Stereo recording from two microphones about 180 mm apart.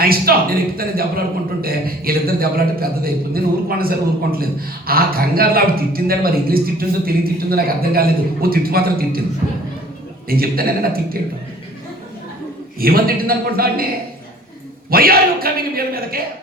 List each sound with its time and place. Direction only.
0.0 s a man's voice: 55° right (ahead or behind)
10.2 s a man's voice: 55° right (ahead or behind)
12.8 s a man's voice: 55° right (ahead or behind)
14.8 s a man's voice: 55° right (ahead or behind)